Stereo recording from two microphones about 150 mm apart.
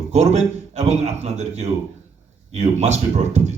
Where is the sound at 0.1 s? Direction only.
50° right (ahead or behind).